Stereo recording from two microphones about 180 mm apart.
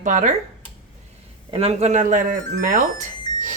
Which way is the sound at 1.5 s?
35° right (ahead or behind).